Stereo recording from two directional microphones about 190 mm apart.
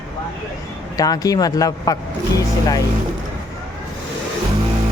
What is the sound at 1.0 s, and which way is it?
Speech, 20° left (ahead or behind).